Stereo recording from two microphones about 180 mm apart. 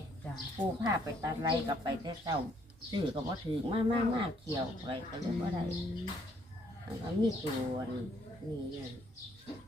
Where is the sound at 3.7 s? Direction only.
30° right (ahead or behind).